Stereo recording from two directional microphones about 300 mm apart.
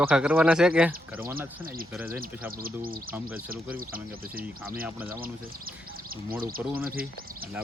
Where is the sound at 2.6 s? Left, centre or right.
Right.